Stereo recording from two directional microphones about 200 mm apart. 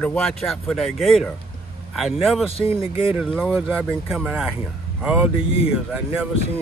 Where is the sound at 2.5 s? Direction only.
25° left (ahead or behind).